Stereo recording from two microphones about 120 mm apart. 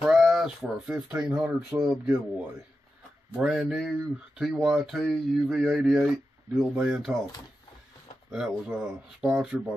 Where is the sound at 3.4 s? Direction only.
5° right (ahead or behind).